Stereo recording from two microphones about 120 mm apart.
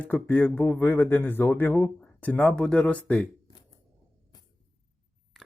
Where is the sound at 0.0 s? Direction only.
15° left (ahead or behind).